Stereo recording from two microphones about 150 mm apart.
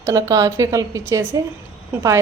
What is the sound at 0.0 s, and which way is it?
A woman's voice, 25° right (ahead or behind).